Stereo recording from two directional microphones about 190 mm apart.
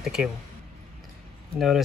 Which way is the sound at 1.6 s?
Centre (ahead or behind).